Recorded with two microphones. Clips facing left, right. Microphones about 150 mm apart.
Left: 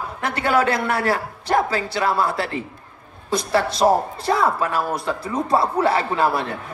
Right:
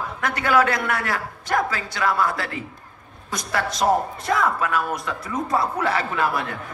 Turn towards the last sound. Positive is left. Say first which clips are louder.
# left 3 dB
turn(degrees=30)  # may be behind; listen again after turning